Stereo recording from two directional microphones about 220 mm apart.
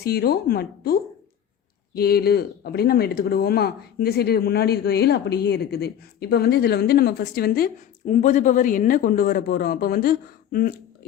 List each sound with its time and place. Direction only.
0.0 s speech: 45° left (ahead or behind)